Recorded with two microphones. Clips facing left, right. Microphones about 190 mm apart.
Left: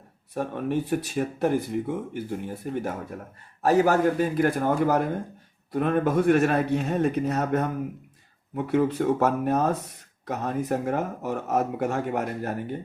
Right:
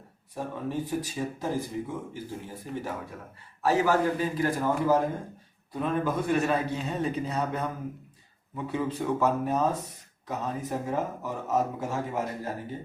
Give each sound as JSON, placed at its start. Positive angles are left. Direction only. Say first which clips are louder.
{"t": 0.3, "sound": "speech", "louder": "left 5 dB", "side_deg": 70}
{"t": 3.6, "sound": "speech", "louder": "left 4 dB", "side_deg": 45}